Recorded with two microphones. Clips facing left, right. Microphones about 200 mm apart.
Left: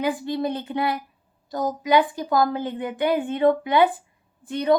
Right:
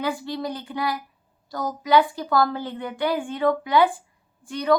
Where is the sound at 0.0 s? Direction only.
20° left (ahead or behind).